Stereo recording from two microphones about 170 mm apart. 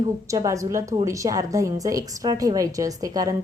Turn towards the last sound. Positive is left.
turn(degrees=-20)  # may be behind; listen again after turning